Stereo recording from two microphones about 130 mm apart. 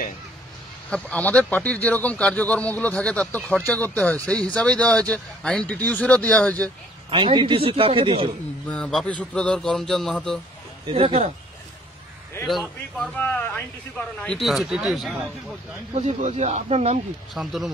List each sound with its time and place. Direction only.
0.8 s speech: 10° left (ahead or behind)
7.1 s a man's voice: 40° right (ahead or behind)
8.6 s speech: 5° left (ahead or behind)
10.9 s speech: 45° right (ahead or behind)
12.4 s speech: 5° left (ahead or behind)
15.9 s speech: 60° right (ahead or behind)
17.3 s speech: centre (ahead or behind)